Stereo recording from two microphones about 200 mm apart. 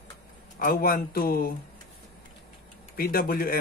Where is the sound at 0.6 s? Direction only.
45° left (ahead or behind).